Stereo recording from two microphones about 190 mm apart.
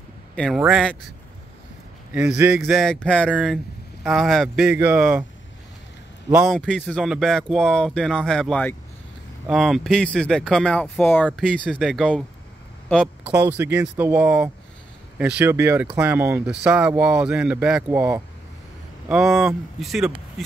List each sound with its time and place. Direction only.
0.6 s speech: 5° right (ahead or behind)
2.1 s speech: 5° right (ahead or behind)
3.3 s speech: 5° right (ahead or behind)
6.3 s speech: centre (ahead or behind)
13.3 s speech: 10° right (ahead or behind)